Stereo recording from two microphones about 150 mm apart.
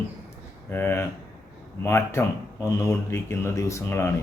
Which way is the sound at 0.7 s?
15° left (ahead or behind).